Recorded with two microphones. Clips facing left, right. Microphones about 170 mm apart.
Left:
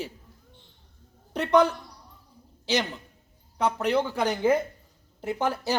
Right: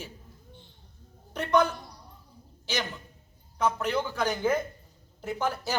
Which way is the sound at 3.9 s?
30° left (ahead or behind).